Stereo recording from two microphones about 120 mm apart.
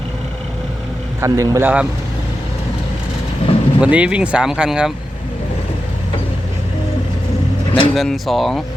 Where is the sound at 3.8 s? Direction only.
10° right (ahead or behind).